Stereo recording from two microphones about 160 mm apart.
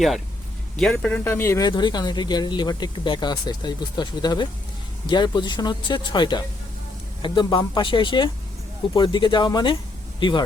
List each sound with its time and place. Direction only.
0.8 s speech: 5° left (ahead or behind); by 10.4 s 30° left (ahead or behind)